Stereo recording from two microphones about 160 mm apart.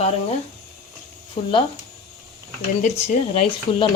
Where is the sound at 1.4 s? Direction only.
30° left (ahead or behind).